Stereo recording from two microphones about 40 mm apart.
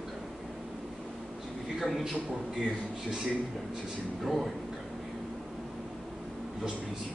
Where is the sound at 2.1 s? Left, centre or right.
Centre.